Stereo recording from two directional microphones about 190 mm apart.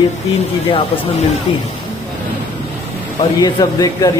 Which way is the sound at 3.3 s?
20° left (ahead or behind).